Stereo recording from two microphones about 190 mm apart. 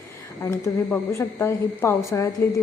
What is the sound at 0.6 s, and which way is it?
A woman's voice, 15° left (ahead or behind).